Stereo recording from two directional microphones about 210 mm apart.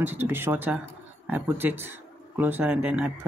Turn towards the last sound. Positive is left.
turn(degrees=-5)  # may be behind; listen again after turning